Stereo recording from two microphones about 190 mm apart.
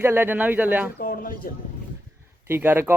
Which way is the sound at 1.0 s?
50° left (ahead or behind).